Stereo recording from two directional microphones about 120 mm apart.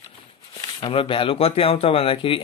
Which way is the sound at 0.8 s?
50° left (ahead or behind).